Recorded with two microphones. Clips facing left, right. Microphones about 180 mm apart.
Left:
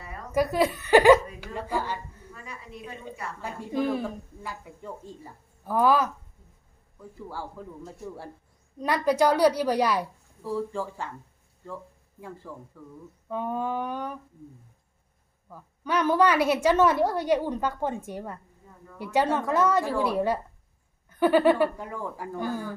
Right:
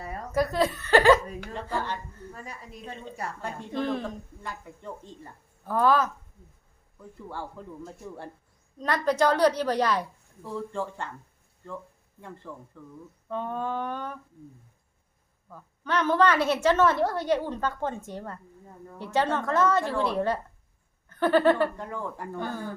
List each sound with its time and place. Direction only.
0.3 s a woman's voice: 10° left (ahead or behind)
2.3 s a woman's voice: 40° right (ahead or behind)
2.9 s a woman's voice: 10° left (ahead or behind)
7.2 s a woman's voice: 5° left (ahead or behind)
12.4 s a woman's voice: 5° left (ahead or behind)
15.4 s a woman's voice: 10° left (ahead or behind)